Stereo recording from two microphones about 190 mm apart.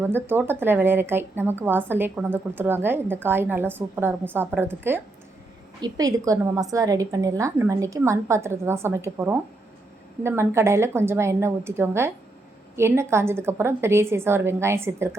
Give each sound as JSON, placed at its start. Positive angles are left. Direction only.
{"t": 0.0, "sound": "a woman's voice", "side_deg": -10}